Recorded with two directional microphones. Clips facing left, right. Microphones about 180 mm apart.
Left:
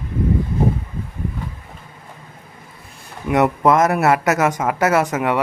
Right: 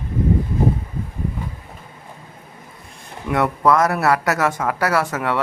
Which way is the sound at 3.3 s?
20° left (ahead or behind).